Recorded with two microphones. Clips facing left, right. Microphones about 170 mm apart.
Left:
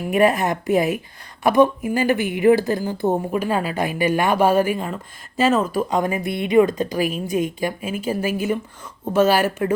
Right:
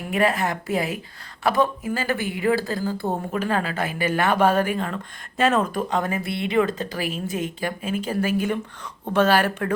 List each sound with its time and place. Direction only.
0.1 s a woman's voice: 20° left (ahead or behind)